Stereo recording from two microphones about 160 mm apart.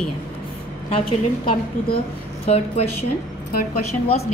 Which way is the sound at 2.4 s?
40° left (ahead or behind).